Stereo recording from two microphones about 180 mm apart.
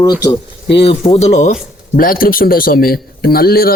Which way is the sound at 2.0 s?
50° left (ahead or behind).